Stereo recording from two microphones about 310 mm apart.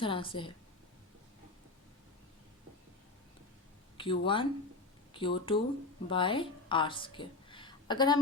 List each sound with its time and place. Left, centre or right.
0.0 s a woman's voice: centre
3.9 s a woman's voice: centre